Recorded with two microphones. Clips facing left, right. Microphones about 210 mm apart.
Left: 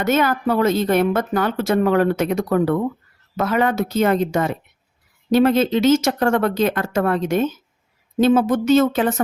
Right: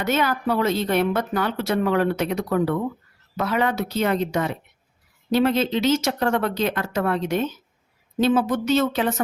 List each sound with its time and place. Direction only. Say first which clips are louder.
0.0 s a woman's voice: left 4 dB; 50° left (ahead or behind)